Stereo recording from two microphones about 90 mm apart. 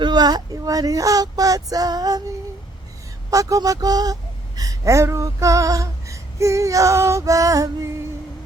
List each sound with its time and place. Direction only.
0.0 s speech: 50° right (ahead or behind)
3.2 s speech: 40° right (ahead or behind)